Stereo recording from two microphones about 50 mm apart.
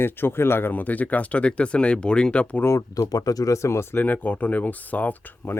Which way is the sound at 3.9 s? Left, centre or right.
Left.